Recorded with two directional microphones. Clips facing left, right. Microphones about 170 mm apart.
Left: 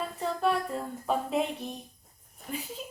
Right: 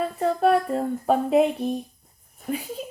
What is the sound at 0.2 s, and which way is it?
Speech, 60° right (ahead or behind).